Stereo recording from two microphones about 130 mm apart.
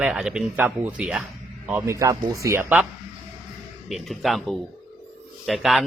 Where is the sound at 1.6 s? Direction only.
20° right (ahead or behind).